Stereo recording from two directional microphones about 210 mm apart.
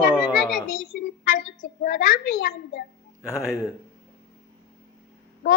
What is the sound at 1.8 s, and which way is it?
A child's voice, 45° left (ahead or behind).